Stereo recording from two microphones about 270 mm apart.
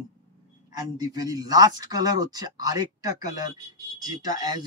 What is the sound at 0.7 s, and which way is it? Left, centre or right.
Speech, centre.